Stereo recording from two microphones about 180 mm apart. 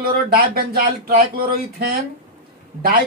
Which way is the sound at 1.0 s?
55° right (ahead or behind).